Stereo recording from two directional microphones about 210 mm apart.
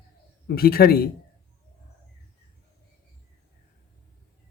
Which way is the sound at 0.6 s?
45° left (ahead or behind).